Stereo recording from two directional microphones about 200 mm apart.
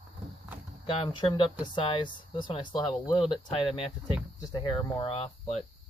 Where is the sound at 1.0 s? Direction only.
25° left (ahead or behind).